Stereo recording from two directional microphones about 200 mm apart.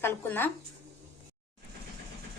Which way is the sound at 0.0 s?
10° left (ahead or behind).